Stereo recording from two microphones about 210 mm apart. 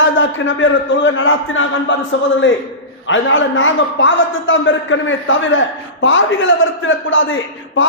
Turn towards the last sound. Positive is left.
turn(degrees=65)  # may be behind; listen again after turning